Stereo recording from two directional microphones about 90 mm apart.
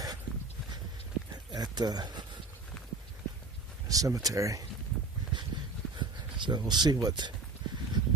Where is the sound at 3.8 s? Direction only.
40° right (ahead or behind).